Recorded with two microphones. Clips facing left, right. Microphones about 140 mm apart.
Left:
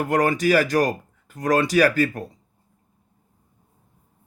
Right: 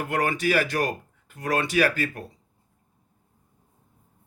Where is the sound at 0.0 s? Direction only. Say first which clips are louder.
Left 5 dB; 40° left (ahead or behind).